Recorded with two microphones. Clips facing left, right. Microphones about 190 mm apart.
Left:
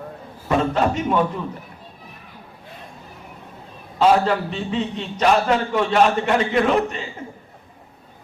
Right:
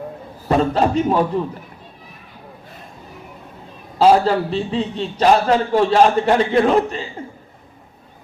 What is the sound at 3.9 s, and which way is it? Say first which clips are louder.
A man's voice: right 3 dB; 35° right (ahead or behind).